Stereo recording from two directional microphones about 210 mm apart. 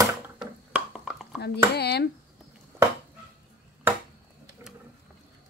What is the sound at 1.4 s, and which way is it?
Speech, 50° left (ahead or behind).